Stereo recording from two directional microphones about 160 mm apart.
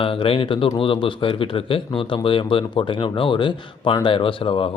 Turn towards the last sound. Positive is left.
turn(degrees=35)  # may be behind; listen again after turning